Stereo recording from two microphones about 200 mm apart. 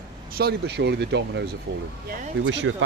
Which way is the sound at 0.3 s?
55° right (ahead or behind).